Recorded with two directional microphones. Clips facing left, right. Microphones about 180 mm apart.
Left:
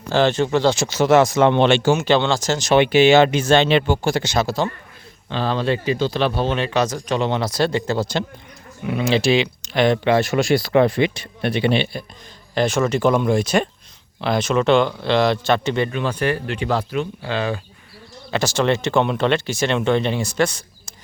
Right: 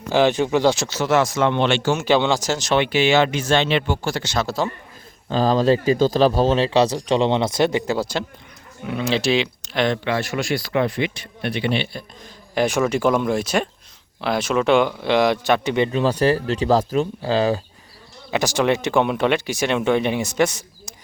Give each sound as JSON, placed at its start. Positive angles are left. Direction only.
{"t": 0.1, "sound": "speech", "side_deg": -10}
{"t": 0.9, "sound": "speech", "side_deg": 20}
{"t": 2.0, "sound": "speech", "side_deg": -10}
{"t": 2.7, "sound": "speech", "side_deg": 20}
{"t": 4.0, "sound": "speech", "side_deg": 15}
{"t": 4.4, "sound": "speech", "side_deg": -5}
{"t": 5.3, "sound": "speech", "side_deg": -40}
{"t": 8.9, "sound": "speech", "side_deg": 0}
{"t": 10.0, "sound": "speech", "side_deg": 25}
{"t": 12.5, "sound": "speech", "side_deg": -10}
{"t": 15.9, "sound": "speech", "side_deg": -35}
{"t": 18.3, "sound": "speech", "side_deg": -15}